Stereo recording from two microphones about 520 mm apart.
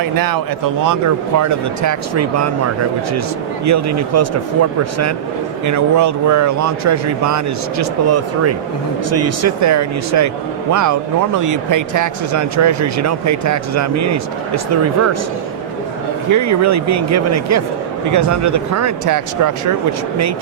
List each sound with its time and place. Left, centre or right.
0.0 s speech: right
3.7 s speech: right
5.6 s speech: right
16.3 s speech: right